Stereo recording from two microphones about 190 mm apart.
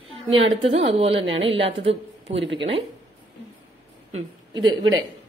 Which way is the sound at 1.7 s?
70° right (ahead or behind).